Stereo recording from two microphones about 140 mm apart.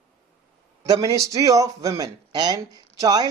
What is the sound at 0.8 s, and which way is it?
Speech, 25° right (ahead or behind).